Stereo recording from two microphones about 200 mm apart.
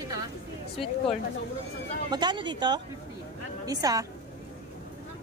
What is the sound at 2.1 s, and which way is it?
Speech, 20° right (ahead or behind).